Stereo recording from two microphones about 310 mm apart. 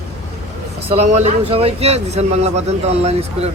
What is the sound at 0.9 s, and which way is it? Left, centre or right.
Speech, right.